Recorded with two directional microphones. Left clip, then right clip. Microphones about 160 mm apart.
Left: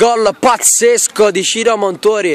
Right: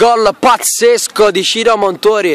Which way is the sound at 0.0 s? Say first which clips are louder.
Right 2 dB; 5° right (ahead or behind).